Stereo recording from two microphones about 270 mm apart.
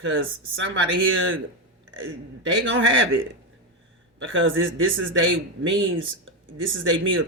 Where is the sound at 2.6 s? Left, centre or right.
Right.